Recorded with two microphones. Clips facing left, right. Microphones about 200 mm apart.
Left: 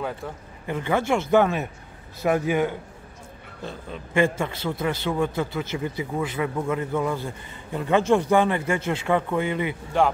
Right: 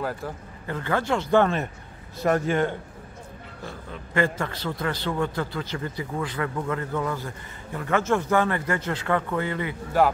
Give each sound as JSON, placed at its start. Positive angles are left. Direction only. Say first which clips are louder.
{"t": 0.7, "sound": "speech", "louder": "left 2 dB", "side_deg": 15}
{"t": 1.3, "sound": "a man's voice", "louder": "even", "side_deg": 5}
{"t": 3.6, "sound": "a man's voice", "louder": "left 4 dB", "side_deg": 20}
{"t": 4.7, "sound": "speech", "louder": "left 2 dB", "side_deg": 20}
{"t": 6.1, "sound": "a man's voice", "louder": "left 2 dB", "side_deg": 10}